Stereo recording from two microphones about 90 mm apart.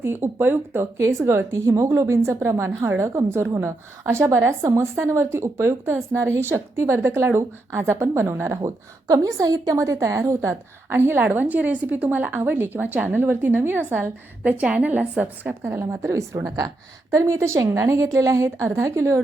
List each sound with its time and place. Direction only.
0.0 s a woman's voice: 25° right (ahead or behind)